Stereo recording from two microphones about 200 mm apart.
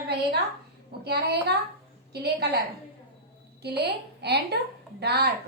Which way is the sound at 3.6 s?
55° right (ahead or behind).